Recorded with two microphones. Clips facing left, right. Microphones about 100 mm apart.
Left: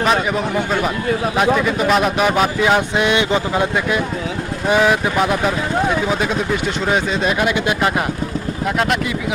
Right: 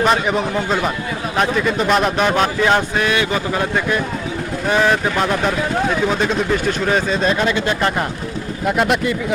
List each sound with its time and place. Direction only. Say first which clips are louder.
0.0 s a man's voice: right 1 dB; centre (ahead or behind)
2.9 s a man's voice: left 2 dB; 20° left (ahead or behind)
8.6 s a man's voice: right 3 dB; centre (ahead or behind)